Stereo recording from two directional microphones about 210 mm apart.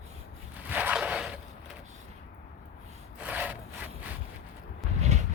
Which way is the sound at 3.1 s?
10° right (ahead or behind).